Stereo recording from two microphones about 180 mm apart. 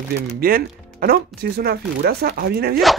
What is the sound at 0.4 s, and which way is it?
Speech, 55° right (ahead or behind).